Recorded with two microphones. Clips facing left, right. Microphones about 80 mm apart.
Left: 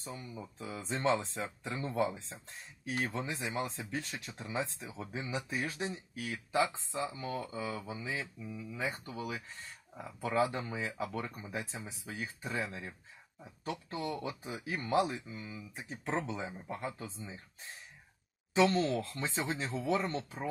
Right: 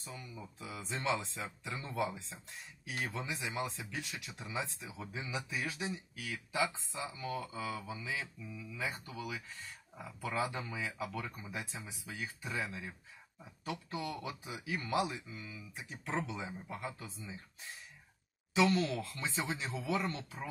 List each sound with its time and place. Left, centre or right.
0.0 s speech: left